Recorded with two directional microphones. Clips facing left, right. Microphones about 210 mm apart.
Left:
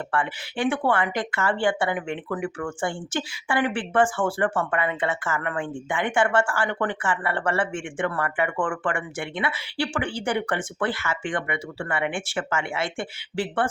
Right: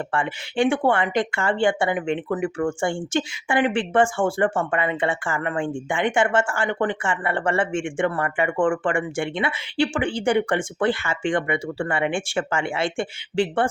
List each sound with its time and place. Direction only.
0.1 s speech: 25° right (ahead or behind)